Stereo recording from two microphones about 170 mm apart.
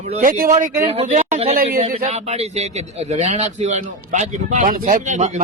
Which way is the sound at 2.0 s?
40° right (ahead or behind).